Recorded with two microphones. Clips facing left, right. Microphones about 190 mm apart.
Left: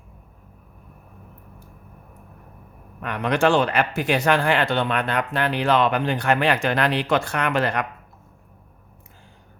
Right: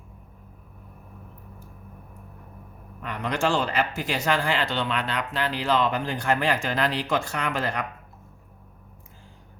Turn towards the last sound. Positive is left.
turn(degrees=65)  # may be behind; listen again after turning